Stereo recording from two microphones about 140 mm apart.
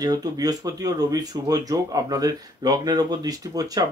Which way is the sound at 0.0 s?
25° right (ahead or behind).